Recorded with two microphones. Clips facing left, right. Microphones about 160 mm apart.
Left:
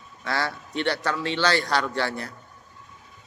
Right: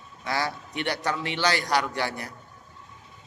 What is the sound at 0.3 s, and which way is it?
A man's voice, 15° right (ahead or behind).